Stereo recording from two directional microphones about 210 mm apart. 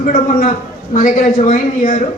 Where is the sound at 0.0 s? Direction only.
40° left (ahead or behind).